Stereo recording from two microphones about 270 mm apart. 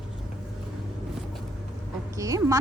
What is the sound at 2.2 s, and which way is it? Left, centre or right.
Speech, centre.